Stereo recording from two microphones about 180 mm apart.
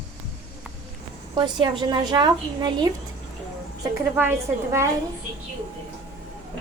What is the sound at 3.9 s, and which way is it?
Speech, 10° right (ahead or behind).